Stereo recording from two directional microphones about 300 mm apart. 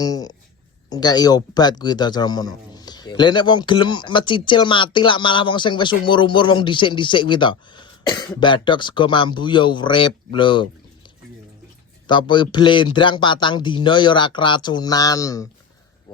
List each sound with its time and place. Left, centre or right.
0.0 s speech: centre
12.0 s speech: centre